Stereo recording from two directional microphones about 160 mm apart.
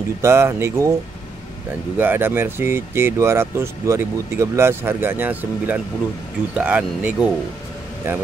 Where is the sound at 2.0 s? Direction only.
10° right (ahead or behind).